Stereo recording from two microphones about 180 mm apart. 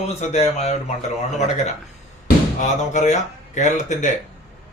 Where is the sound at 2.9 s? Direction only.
40° left (ahead or behind).